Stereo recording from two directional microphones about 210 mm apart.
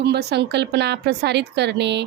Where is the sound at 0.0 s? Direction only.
50° right (ahead or behind).